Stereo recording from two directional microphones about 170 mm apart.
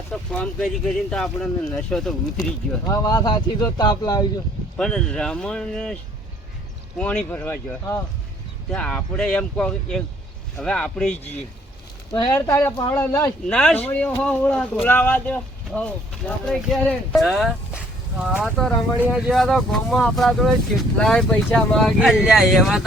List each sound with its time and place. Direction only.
0.1 s speech: 5° left (ahead or behind)
2.8 s speech: 20° left (ahead or behind)
4.8 s speech: 5° left (ahead or behind)
7.0 s speech: 10° left (ahead or behind)
12.1 s speech: 20° left (ahead or behind); by 22.8 s centre (ahead or behind)